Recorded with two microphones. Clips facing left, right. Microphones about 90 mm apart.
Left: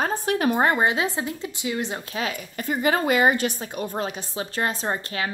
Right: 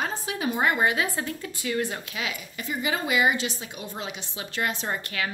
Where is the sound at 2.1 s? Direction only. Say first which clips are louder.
Left 4 dB; 40° left (ahead or behind).